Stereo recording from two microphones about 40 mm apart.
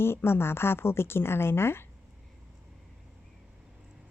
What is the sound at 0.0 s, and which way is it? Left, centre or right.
Speech, left.